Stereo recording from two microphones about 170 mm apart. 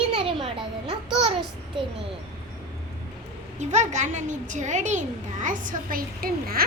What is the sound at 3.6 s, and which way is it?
A child's voice, 45° right (ahead or behind).